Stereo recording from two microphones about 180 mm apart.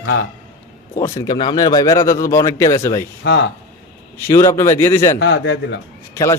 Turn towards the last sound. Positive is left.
turn(degrees=15)  # may be behind; listen again after turning